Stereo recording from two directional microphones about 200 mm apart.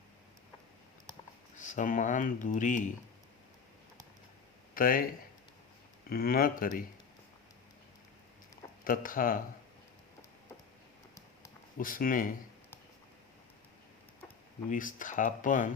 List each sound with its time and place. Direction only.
1.5 s speech: 40° left (ahead or behind)
4.7 s speech: 45° left (ahead or behind)
6.1 s speech: 45° left (ahead or behind)
8.8 s speech: 45° left (ahead or behind)
11.8 s speech: 45° left (ahead or behind)
14.7 s speech: 40° left (ahead or behind)